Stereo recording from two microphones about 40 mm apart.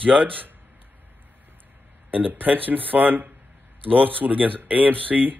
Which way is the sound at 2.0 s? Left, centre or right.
Right.